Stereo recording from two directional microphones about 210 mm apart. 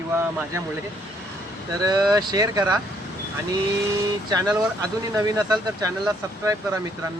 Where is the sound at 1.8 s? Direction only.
20° right (ahead or behind).